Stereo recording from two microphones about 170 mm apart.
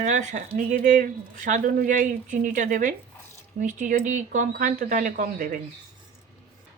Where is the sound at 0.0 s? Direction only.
45° right (ahead or behind).